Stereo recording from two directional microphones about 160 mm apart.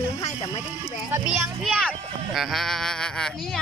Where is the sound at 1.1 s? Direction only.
5° right (ahead or behind).